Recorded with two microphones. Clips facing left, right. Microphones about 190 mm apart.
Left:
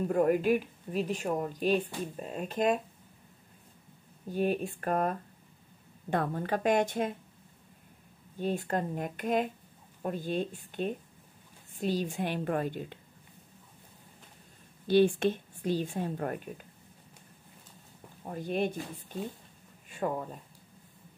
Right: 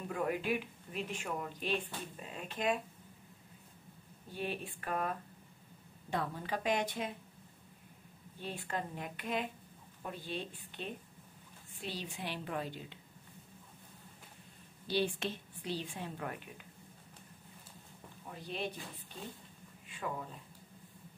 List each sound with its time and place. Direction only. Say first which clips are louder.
0.0 s a woman's voice: left 10 dB; 45° left (ahead or behind)
4.3 s a woman's voice: left 10 dB; 45° left (ahead or behind)
8.4 s a woman's voice: left 9 dB; 45° left (ahead or behind)
14.9 s a woman's voice: left 11 dB; 50° left (ahead or behind)
18.2 s a woman's voice: left 9 dB; 50° left (ahead or behind)
19.9 s speech: left 8 dB; 45° left (ahead or behind)